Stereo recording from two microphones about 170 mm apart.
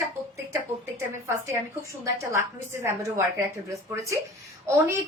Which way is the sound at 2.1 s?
15° right (ahead or behind).